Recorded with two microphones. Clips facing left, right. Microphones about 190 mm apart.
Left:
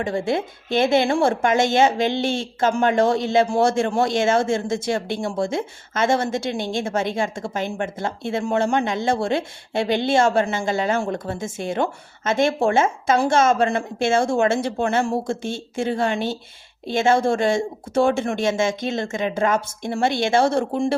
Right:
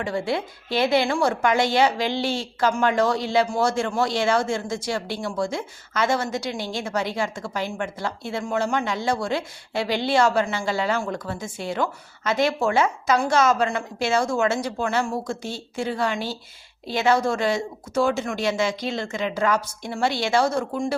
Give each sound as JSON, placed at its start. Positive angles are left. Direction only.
{"t": 0.0, "sound": "a woman's voice", "side_deg": 25}